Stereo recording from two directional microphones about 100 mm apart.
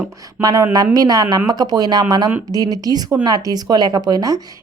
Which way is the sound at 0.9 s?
40° right (ahead or behind).